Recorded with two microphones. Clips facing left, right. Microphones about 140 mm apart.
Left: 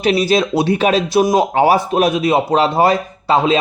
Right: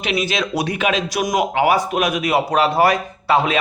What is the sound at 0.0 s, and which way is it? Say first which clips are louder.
Speech: left 7 dB; 35° left (ahead or behind).